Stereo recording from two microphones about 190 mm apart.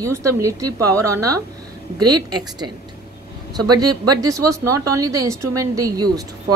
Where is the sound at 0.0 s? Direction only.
15° right (ahead or behind).